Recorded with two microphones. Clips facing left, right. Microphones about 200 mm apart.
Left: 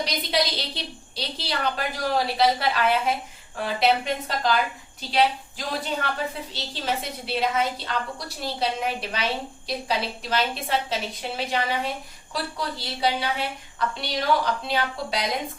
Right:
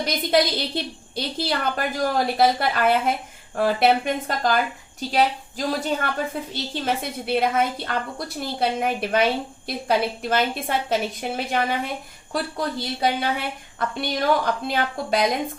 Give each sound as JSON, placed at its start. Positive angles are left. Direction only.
{"t": 0.0, "sound": "a woman's voice", "side_deg": -50}
{"t": 10.2, "sound": "a woman's voice", "side_deg": -50}